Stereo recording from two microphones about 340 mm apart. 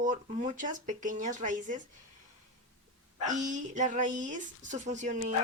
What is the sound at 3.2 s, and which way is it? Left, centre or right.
Speech, right.